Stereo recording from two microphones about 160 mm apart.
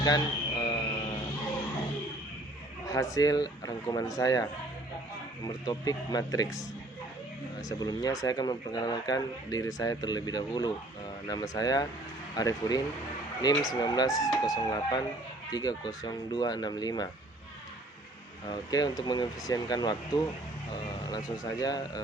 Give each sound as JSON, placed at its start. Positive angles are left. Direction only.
{"t": 0.0, "sound": "a sound", "side_deg": 25}
{"t": 2.8, "sound": "speech", "side_deg": 20}
{"t": 5.5, "sound": "speech", "side_deg": 25}
{"t": 7.7, "sound": "speech", "side_deg": 25}
{"t": 18.4, "sound": "speech", "side_deg": 25}